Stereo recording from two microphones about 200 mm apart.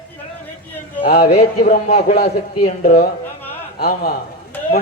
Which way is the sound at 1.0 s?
50° left (ahead or behind).